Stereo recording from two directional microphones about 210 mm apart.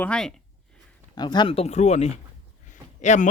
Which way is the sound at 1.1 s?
20° left (ahead or behind).